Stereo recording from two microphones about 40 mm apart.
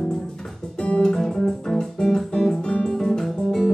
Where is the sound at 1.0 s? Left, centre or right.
Centre.